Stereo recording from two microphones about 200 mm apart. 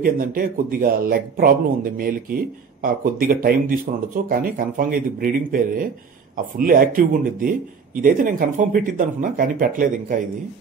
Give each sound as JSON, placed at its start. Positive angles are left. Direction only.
{"t": 0.0, "sound": "speech", "side_deg": -45}